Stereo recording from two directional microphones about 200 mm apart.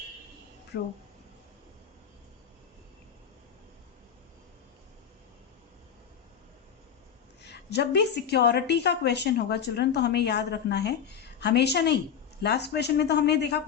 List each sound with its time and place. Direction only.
0.7 s a woman's voice: 60° left (ahead or behind)
7.4 s a woman's voice: 55° left (ahead or behind)